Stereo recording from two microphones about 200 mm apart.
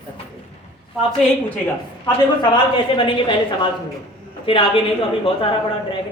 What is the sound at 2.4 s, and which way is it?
A woman's voice, 25° left (ahead or behind).